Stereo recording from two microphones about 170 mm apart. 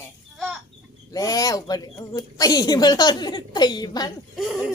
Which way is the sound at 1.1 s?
20° left (ahead or behind).